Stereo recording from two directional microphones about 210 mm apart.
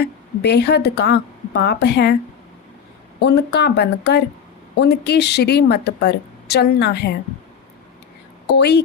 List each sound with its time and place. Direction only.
0.0 s a woman's voice: 50° left (ahead or behind)
3.2 s a woman's voice: 50° left (ahead or behind)
8.5 s a woman's voice: 50° left (ahead or behind)